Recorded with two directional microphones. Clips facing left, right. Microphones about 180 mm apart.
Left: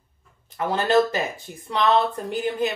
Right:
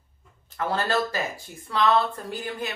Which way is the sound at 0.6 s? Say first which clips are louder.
Left 6 dB; 15° left (ahead or behind).